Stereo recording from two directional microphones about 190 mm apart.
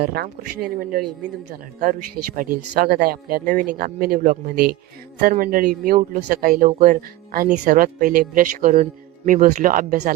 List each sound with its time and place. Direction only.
0.0 s speech: 55° right (ahead or behind)